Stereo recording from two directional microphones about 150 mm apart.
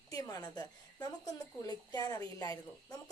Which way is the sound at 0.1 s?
25° left (ahead or behind).